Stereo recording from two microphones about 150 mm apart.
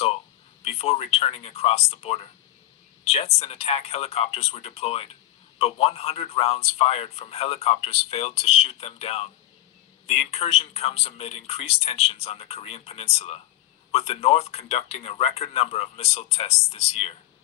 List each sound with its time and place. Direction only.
0.6 s speech: 40° left (ahead or behind)